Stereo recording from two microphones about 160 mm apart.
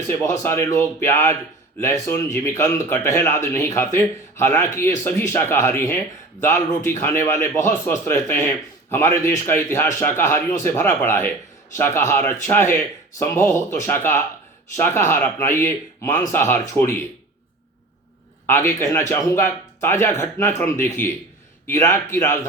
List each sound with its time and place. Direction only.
0.1 s speech: 15° left (ahead or behind)
18.4 s speech: 15° left (ahead or behind)